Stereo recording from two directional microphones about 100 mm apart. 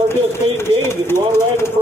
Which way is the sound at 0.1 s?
25° left (ahead or behind).